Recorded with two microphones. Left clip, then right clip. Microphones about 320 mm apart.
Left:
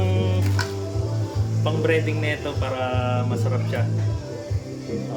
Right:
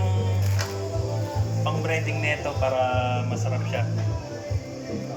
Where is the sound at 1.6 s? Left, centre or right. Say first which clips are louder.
Left 6 dB; centre.